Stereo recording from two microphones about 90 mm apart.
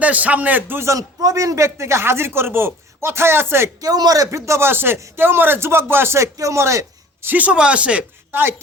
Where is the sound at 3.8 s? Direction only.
45° right (ahead or behind).